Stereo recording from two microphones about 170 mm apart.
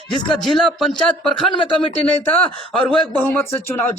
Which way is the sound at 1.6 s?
30° left (ahead or behind).